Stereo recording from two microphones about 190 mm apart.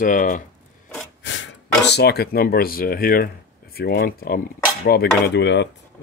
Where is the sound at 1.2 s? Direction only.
75° left (ahead or behind).